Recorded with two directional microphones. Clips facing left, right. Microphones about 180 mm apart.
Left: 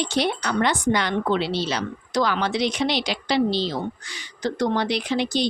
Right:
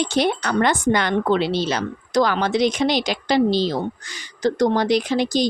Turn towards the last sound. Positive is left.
turn(degrees=-40)  # may be behind; listen again after turning